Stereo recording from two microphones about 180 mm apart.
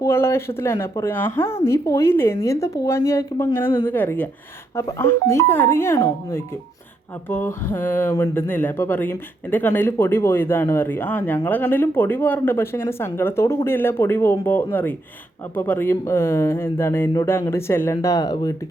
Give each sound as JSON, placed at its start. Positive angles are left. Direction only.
{"t": 0.0, "sound": "speech", "side_deg": 15}